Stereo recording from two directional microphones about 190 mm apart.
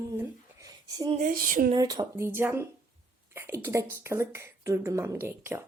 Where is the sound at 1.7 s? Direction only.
20° right (ahead or behind).